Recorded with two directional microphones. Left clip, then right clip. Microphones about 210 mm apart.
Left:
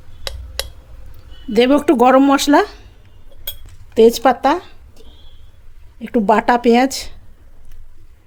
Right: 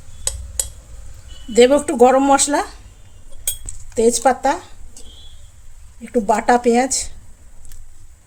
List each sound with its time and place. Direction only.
1.5 s speech: 45° left (ahead or behind)
3.9 s speech: 45° left (ahead or behind)
6.0 s speech: 45° left (ahead or behind)